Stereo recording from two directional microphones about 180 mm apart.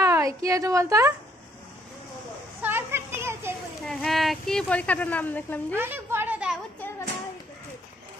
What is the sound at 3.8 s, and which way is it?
Speech, centre (ahead or behind).